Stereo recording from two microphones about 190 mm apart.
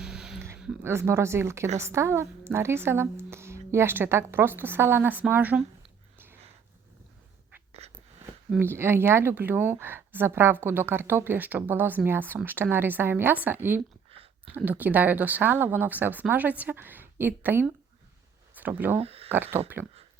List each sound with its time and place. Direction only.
0.0 s a sound: 5° right (ahead or behind)
0.4 s speech: 5° right (ahead or behind)
7.7 s a sound: 35° right (ahead or behind)
8.4 s speech: 10° right (ahead or behind)
18.9 s speech: 30° right (ahead or behind)
19.3 s speech: 10° right (ahead or behind)